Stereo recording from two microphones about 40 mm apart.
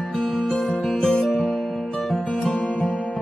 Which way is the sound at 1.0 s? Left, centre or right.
Centre.